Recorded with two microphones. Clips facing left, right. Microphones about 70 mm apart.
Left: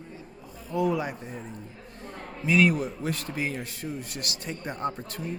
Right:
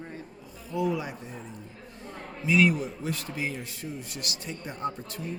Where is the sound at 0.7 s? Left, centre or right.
Left.